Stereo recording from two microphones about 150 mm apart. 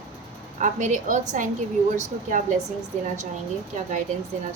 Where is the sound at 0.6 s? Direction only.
55° right (ahead or behind).